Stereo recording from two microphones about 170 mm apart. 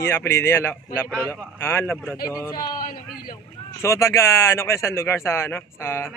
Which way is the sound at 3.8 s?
15° left (ahead or behind).